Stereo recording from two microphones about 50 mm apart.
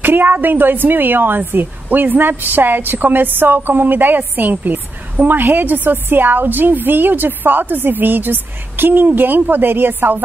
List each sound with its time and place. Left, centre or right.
0.0 s a woman's voice: right